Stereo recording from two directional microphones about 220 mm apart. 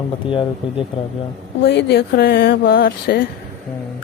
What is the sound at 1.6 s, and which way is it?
Speech, 50° left (ahead or behind).